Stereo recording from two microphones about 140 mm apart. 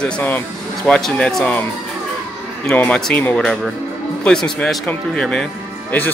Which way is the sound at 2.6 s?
10° left (ahead or behind).